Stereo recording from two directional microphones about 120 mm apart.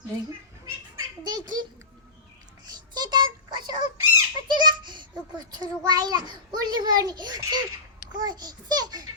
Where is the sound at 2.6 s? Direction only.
35° right (ahead or behind).